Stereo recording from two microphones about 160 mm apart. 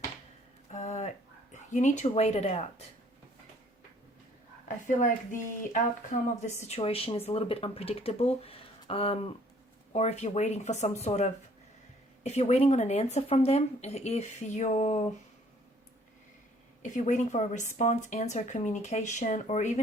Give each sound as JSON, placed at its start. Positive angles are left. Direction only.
{"t": 0.7, "sound": "a sound", "side_deg": 45}
{"t": 1.5, "sound": "speech", "side_deg": 50}
{"t": 5.7, "sound": "speech", "side_deg": 50}
{"t": 16.8, "sound": "speech", "side_deg": 50}